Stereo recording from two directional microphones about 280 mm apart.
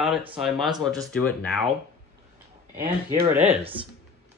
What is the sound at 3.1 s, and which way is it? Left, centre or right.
Speech, centre.